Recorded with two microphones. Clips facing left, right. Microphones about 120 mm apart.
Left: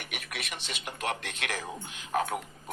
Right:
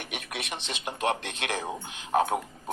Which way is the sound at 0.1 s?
25° right (ahead or behind).